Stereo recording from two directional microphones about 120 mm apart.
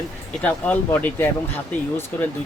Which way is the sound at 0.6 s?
15° left (ahead or behind).